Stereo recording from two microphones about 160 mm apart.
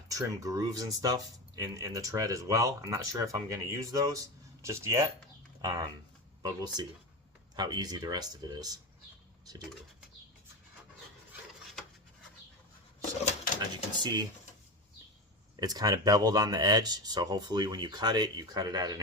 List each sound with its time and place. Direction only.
0.1 s speech: 20° right (ahead or behind)
13.6 s speech: 25° right (ahead or behind)
15.6 s speech: 25° right (ahead or behind)